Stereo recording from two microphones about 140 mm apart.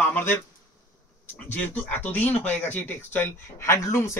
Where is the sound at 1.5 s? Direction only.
10° left (ahead or behind).